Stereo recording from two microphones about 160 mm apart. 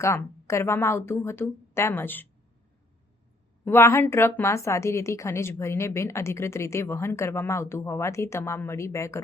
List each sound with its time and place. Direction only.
0.0 s a woman's voice: 15° left (ahead or behind)
3.6 s a woman's voice: 15° left (ahead or behind)